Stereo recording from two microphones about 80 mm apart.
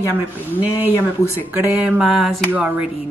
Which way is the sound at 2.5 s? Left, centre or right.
Right.